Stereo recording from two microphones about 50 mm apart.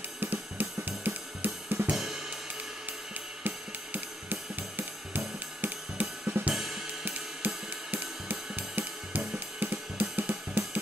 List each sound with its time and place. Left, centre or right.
0.2 s cymbal: right
2.0 s cymbal: centre
3.4 s music: right
5.6 s drum kit: right
6.5 s drum kit: centre
7.4 s cymbal: right
8.3 s music: right
9.6 s cymbal: right